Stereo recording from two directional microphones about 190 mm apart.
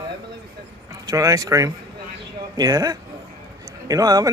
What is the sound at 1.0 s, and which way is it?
Speech, 15° right (ahead or behind).